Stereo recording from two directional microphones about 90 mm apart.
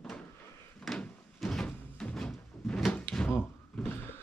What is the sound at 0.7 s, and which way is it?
Door, 10° left (ahead or behind).